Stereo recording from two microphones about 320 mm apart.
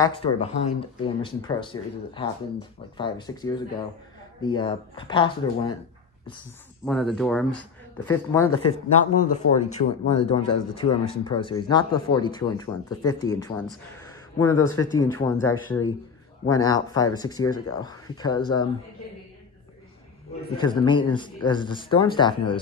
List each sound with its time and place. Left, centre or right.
0.0 s speech: centre
6.9 s speech: centre
9.1 s speech: left
10.1 s speech: centre
20.5 s speech: centre